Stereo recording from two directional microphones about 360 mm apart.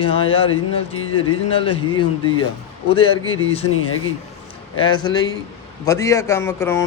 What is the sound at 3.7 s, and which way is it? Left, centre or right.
Speech, left.